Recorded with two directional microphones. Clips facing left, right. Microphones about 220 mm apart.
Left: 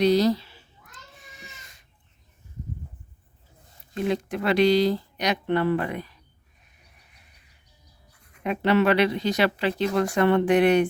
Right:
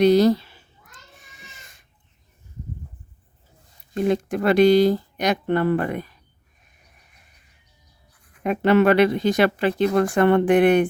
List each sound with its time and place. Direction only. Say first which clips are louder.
0.0 s speech: right 4 dB; 55° right (ahead or behind)
3.9 s speech: right 5 dB; 45° right (ahead or behind)
8.4 s speech: right 4 dB; 50° right (ahead or behind)